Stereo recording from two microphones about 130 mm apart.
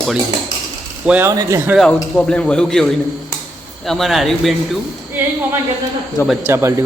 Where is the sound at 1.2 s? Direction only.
25° right (ahead or behind).